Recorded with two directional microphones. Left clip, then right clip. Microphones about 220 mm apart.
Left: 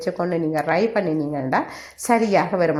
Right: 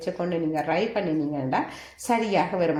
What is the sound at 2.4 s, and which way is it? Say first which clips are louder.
Speech: left 4 dB; 35° left (ahead or behind).